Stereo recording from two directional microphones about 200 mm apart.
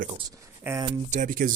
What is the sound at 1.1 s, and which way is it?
Speech, 40° right (ahead or behind).